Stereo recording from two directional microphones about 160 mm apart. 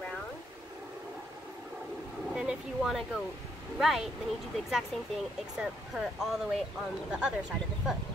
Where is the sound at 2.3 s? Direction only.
5° right (ahead or behind).